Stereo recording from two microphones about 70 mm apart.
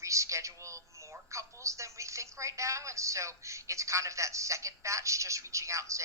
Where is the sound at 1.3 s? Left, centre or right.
Right.